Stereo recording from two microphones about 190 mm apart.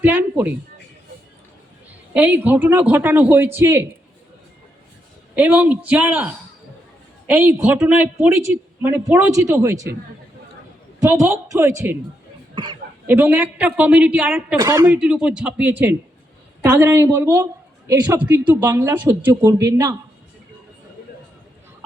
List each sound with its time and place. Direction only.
0.0 s a woman's voice: 10° right (ahead or behind)
2.1 s a woman's voice: 10° right (ahead or behind)
5.3 s a woman's voice: 5° right (ahead or behind)
11.0 s a woman's voice: 15° right (ahead or behind)
13.1 s a woman's voice: 10° right (ahead or behind)
14.6 s speech: 20° right (ahead or behind)
14.9 s a man's voice: 5° right (ahead or behind)